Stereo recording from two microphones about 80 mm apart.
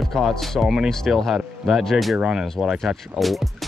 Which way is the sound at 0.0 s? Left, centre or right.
Centre.